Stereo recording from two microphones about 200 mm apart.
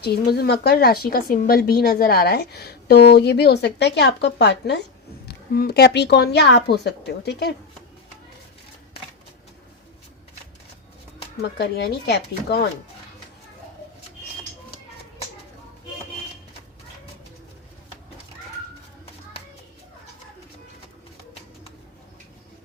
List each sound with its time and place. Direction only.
0.0 s a woman's voice: 50° left (ahead or behind)
11.4 s a woman's voice: 55° left (ahead or behind)